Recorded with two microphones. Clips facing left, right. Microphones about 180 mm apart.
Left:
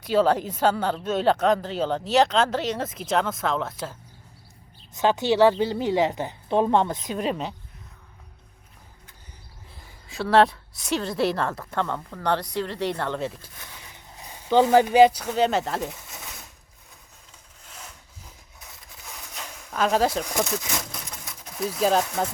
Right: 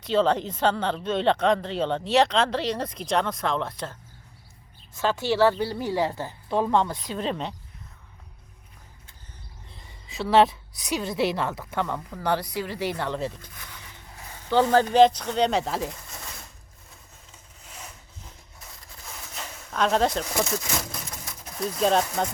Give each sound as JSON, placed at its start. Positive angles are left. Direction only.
{"t": 0.0, "sound": "speech", "side_deg": 5}
{"t": 4.9, "sound": "a woman's voice", "side_deg": 20}
{"t": 9.7, "sound": "speech", "side_deg": 0}
{"t": 14.2, "sound": "speech", "side_deg": 15}
{"t": 17.6, "sound": "wood", "side_deg": -5}
{"t": 18.2, "sound": "a sound", "side_deg": 0}